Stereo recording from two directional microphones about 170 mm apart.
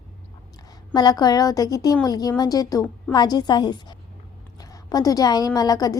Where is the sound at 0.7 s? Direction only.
25° left (ahead or behind).